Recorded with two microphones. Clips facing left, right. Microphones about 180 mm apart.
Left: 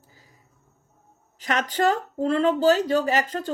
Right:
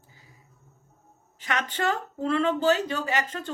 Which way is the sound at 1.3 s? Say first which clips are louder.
Left 5 dB; 40° left (ahead or behind).